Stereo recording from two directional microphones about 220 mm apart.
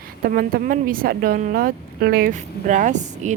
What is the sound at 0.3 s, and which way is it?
A woman's voice, 40° right (ahead or behind).